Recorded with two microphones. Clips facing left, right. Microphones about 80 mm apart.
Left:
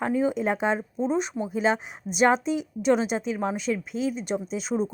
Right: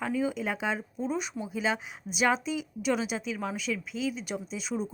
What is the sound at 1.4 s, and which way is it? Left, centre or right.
Speech, left.